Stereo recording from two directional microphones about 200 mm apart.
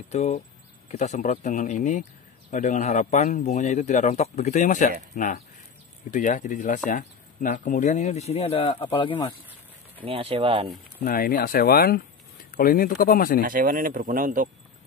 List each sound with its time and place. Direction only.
0.1 s speech: 30° left (ahead or behind)
10.0 s speech: 30° right (ahead or behind)
11.1 s speech: 45° left (ahead or behind)
13.4 s speech: 45° right (ahead or behind)